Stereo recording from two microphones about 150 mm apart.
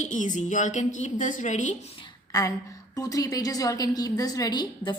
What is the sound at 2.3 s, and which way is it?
A woman's voice, 25° left (ahead or behind).